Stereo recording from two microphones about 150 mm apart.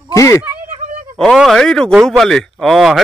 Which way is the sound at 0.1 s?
20° left (ahead or behind).